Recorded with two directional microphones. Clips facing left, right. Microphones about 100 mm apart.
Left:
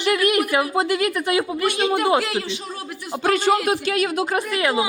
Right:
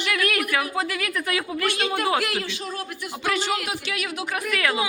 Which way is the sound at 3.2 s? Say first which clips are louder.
Left 7 dB; 50° left (ahead or behind).